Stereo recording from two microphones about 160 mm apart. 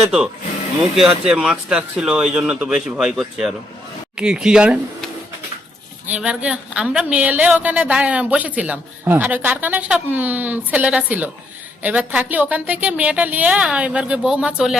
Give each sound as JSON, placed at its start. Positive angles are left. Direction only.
{"t": 0.9, "sound": "speech", "side_deg": -5}
{"t": 6.1, "sound": "a woman's voice", "side_deg": -10}